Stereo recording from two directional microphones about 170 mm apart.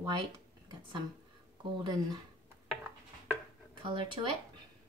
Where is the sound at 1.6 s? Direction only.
25° right (ahead or behind).